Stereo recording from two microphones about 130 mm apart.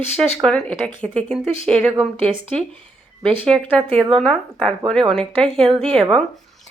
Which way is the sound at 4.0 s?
5° left (ahead or behind).